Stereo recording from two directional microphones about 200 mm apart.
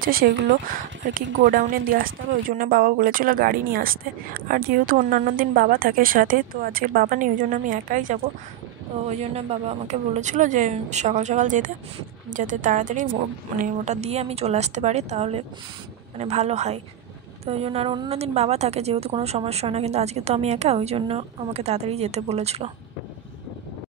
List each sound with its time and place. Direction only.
0.1 s a woman's voice: 45° right (ahead or behind); by 22.7 s 30° right (ahead or behind)